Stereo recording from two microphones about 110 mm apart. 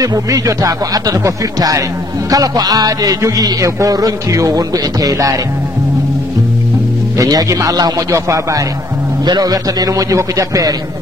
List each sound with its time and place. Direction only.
0.0 s music: 35° right (ahead or behind)
7.2 s music: 35° right (ahead or behind)